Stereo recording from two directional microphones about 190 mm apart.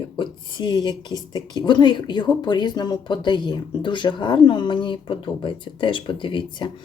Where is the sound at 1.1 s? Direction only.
20° right (ahead or behind).